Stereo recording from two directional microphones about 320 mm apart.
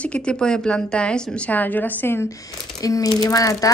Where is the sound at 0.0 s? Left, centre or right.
Centre.